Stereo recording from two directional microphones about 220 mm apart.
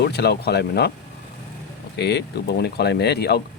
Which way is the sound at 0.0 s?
50° left (ahead or behind).